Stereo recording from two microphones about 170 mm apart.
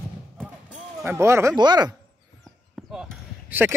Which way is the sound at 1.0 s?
15° right (ahead or behind).